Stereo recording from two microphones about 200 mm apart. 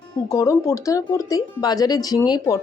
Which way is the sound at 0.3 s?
15° left (ahead or behind).